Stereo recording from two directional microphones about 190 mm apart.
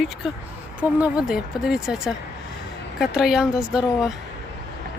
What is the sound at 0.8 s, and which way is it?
Speech, 5° right (ahead or behind).